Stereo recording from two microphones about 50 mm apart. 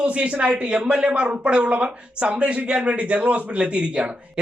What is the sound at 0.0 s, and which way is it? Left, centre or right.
Speech, right.